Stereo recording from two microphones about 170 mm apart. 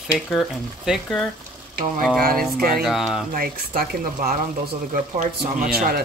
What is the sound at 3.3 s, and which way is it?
Speech, 60° right (ahead or behind).